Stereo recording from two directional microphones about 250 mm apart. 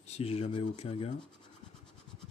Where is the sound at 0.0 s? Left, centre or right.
Left.